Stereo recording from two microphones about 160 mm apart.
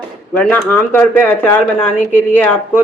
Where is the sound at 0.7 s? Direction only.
15° left (ahead or behind).